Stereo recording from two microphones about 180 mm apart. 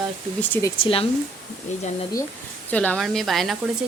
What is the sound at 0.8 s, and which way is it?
Speech, 30° left (ahead or behind).